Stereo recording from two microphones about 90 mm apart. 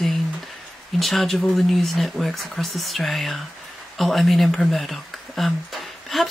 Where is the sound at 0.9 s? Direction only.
Centre (ahead or behind).